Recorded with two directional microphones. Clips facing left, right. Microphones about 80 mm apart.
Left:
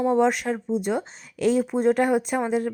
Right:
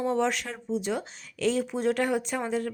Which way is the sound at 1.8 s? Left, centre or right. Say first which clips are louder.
Left 5 dB; left.